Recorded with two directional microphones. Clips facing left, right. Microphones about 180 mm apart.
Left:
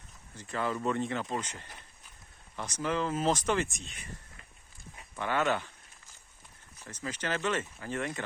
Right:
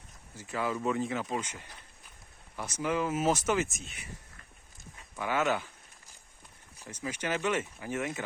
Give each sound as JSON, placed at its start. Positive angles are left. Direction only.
{"t": 0.3, "sound": "speech", "side_deg": -5}
{"t": 5.1, "sound": "speech", "side_deg": -10}
{"t": 6.8, "sound": "speech", "side_deg": -10}